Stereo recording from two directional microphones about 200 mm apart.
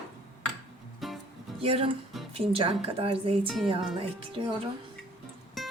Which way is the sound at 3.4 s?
Centre (ahead or behind).